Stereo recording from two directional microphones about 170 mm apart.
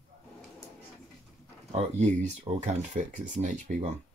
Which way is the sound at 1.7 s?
40° right (ahead or behind).